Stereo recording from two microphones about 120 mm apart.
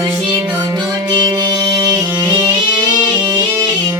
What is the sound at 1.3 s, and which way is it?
Music, 30° right (ahead or behind).